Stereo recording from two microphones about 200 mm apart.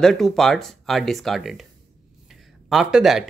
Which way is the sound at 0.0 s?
Centre (ahead or behind).